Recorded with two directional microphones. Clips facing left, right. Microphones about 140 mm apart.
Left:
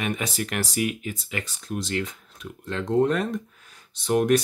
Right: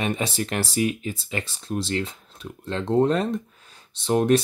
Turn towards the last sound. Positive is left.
turn(degrees=-30)  # may be behind; listen again after turning